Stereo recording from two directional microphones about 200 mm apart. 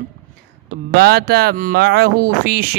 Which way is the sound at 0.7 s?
50° right (ahead or behind).